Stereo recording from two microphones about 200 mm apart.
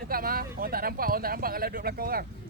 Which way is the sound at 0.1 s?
45° right (ahead or behind).